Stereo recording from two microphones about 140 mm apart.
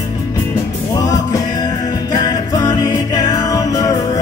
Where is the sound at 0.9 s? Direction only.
25° left (ahead or behind).